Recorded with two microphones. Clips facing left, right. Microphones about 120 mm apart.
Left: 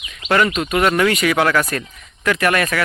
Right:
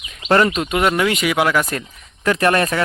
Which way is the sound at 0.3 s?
30° right (ahead or behind).